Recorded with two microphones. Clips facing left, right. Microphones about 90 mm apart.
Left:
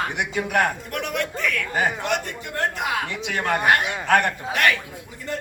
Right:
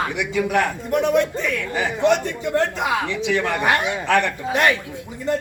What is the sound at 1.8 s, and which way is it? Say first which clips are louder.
Speech: left 2 dB; 50° left (ahead or behind).